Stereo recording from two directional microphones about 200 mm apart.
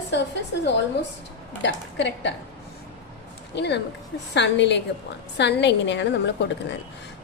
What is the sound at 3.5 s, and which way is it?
A woman's voice, 60° left (ahead or behind).